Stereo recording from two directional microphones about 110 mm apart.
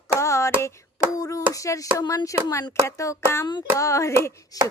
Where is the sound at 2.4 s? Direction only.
30° left (ahead or behind).